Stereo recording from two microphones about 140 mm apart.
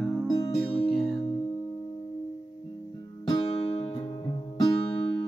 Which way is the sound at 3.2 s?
35° left (ahead or behind).